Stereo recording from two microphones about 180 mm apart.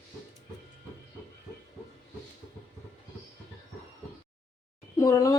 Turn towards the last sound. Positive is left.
turn(degrees=20)  # may be behind; listen again after turning